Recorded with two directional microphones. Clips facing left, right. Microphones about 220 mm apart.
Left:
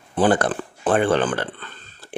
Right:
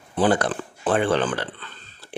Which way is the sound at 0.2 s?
50° left (ahead or behind).